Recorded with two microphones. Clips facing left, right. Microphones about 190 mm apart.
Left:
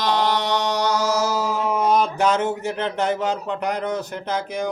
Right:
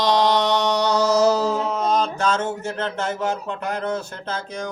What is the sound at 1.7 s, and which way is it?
Speech, 10° left (ahead or behind).